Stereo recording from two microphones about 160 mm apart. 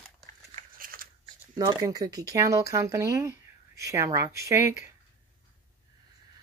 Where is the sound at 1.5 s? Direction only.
20° right (ahead or behind).